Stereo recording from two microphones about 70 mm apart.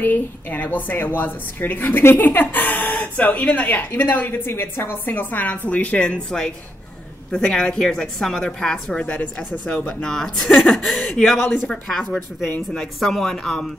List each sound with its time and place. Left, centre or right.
0.0 s a woman's voice: left
10.0 s a woman's voice: centre